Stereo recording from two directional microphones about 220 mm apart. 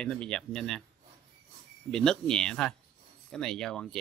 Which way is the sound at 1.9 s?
5° left (ahead or behind).